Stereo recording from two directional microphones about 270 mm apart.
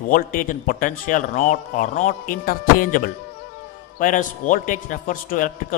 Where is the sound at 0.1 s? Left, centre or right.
Left.